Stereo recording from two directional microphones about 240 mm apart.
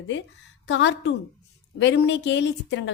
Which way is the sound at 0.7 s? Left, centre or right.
Left.